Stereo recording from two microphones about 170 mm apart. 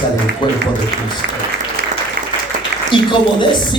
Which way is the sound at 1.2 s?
90° right.